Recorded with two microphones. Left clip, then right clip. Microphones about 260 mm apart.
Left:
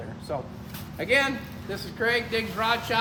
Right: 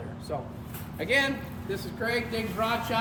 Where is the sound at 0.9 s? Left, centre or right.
Left.